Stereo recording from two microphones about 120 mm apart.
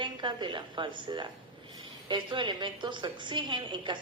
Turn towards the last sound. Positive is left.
turn(degrees=-40)  # may be behind; listen again after turning